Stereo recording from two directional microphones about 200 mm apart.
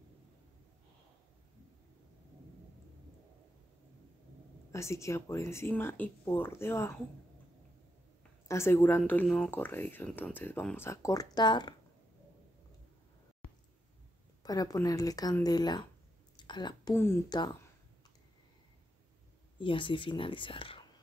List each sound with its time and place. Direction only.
4.7 s speech: 15° left (ahead or behind)
8.5 s speech: 15° left (ahead or behind)
14.4 s speech: 20° left (ahead or behind)
16.3 s a sound: 20° left (ahead or behind)
16.9 s speech: 10° left (ahead or behind)
19.6 s speech: 25° left (ahead or behind)